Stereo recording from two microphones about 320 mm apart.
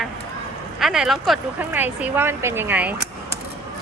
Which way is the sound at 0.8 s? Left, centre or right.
Centre.